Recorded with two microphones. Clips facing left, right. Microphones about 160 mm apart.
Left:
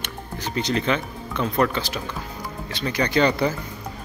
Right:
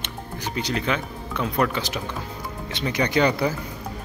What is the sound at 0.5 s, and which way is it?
Speech, 5° right (ahead or behind).